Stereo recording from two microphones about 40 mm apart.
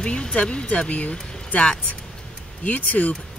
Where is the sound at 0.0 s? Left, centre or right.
Left.